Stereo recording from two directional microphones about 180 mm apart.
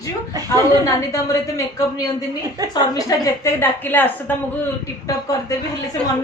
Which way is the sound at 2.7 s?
20° left (ahead or behind).